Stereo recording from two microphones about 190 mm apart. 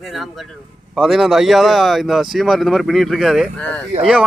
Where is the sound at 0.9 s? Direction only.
Centre (ahead or behind).